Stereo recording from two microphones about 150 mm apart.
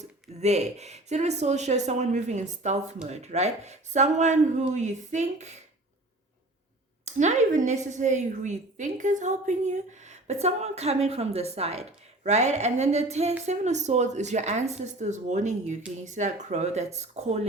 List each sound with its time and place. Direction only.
0.0 s a woman's voice: 50° right (ahead or behind)
7.0 s a woman's voice: 50° right (ahead or behind)